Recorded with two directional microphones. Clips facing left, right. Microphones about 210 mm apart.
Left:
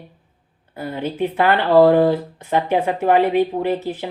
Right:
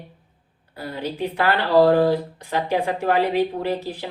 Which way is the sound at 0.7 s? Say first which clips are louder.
Left 4 dB; 20° left (ahead or behind).